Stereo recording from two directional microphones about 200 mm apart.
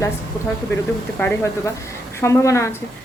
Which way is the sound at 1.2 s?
10° left (ahead or behind).